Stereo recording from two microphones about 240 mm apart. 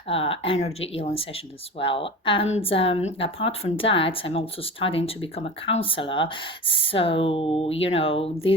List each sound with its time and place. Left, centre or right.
0.1 s speech: left